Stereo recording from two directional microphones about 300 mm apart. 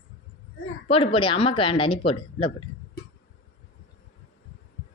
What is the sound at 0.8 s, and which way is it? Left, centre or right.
Speech, centre.